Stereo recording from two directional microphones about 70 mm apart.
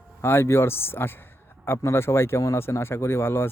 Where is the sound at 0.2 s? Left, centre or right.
Left.